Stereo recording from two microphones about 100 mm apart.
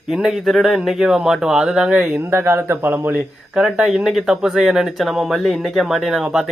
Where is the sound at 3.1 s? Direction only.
5° right (ahead or behind).